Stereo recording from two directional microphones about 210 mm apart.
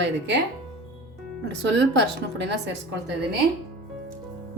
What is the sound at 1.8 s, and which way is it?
Speech, 55° right (ahead or behind).